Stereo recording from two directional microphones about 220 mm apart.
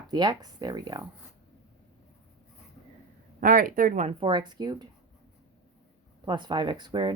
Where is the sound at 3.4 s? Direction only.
40° right (ahead or behind); by 4.9 s 20° right (ahead or behind).